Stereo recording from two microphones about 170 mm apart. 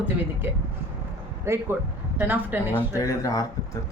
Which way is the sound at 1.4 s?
15° right (ahead or behind).